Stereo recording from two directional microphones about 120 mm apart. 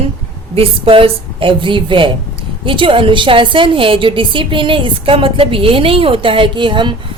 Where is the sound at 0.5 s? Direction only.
50° right (ahead or behind).